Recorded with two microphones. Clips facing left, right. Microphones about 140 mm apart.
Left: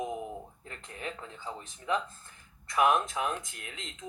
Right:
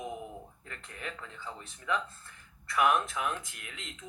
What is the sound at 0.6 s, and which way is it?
Speech, 30° left (ahead or behind).